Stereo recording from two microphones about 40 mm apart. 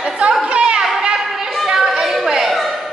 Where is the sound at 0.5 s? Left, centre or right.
Right.